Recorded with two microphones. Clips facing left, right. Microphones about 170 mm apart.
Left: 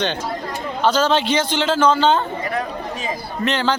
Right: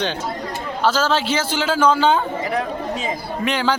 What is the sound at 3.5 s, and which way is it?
Speech, 10° right (ahead or behind).